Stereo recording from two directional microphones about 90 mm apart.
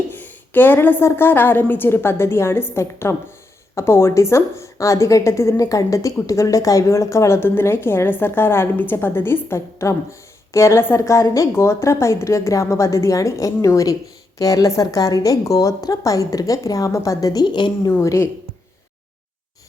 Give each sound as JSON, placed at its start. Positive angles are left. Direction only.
{"t": 0.3, "sound": "a woman's voice", "side_deg": 20}
{"t": 17.4, "sound": "a woman's voice", "side_deg": 60}
{"t": 18.0, "sound": "a woman's voice", "side_deg": 35}